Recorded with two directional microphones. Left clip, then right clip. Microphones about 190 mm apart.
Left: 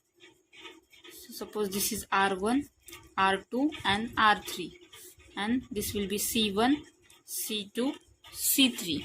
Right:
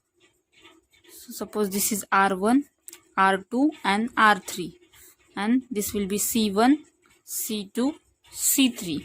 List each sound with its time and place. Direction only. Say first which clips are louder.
1.4 s speech: right 5 dB; 55° right (ahead or behind)